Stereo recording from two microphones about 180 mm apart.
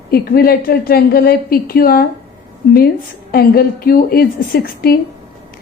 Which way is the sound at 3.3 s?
55° left (ahead or behind).